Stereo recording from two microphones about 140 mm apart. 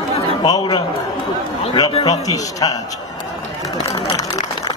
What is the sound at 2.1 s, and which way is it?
Speech, 25° left (ahead or behind).